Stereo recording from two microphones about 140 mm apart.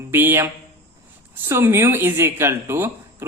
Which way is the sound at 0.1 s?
15° right (ahead or behind).